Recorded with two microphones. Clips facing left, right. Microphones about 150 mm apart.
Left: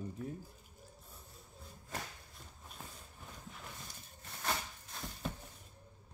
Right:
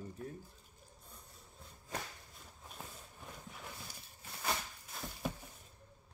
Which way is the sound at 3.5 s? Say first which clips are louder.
Right 1 dB; 5° right (ahead or behind).